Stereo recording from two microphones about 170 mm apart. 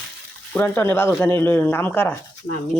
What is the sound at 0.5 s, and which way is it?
Speech, 15° left (ahead or behind).